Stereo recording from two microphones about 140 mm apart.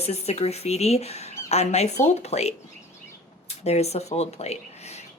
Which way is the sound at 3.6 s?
50° left (ahead or behind).